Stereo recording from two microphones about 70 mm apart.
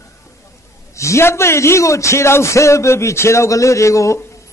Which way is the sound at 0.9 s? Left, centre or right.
Left.